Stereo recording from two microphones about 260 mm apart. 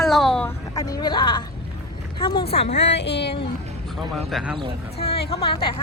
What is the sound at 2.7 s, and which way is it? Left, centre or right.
Speech, left.